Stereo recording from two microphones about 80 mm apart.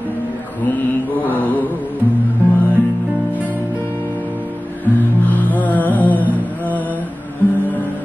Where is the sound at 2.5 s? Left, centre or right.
Left.